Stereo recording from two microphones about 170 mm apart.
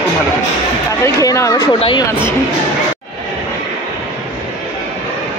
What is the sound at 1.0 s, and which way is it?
Speech, 20° left (ahead or behind).